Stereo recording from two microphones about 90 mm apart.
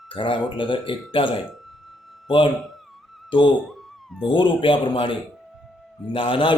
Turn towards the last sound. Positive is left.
turn(degrees=70)  # may be behind; listen again after turning